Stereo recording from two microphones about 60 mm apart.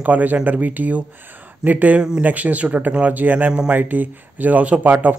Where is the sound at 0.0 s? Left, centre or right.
Right.